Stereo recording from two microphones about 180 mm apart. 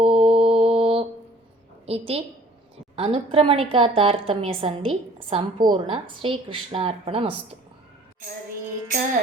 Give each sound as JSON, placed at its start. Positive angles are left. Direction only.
{"t": 0.0, "sound": "mantra", "side_deg": -30}
{"t": 1.9, "sound": "a woman's voice", "side_deg": -35}